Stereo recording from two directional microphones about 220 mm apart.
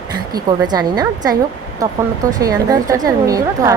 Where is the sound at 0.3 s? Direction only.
20° right (ahead or behind).